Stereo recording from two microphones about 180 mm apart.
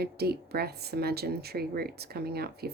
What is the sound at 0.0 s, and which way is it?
Speech, 60° right (ahead or behind).